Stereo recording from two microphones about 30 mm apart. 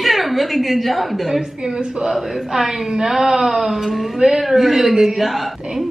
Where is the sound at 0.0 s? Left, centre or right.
Centre.